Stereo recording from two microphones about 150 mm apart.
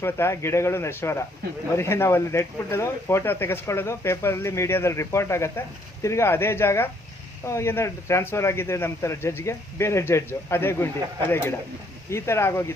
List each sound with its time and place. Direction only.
0.0 s speech: 15° left (ahead or behind)